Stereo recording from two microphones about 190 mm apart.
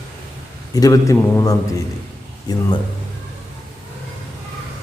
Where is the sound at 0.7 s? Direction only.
20° left (ahead or behind).